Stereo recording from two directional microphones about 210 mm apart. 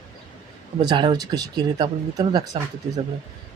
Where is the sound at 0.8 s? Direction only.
20° right (ahead or behind).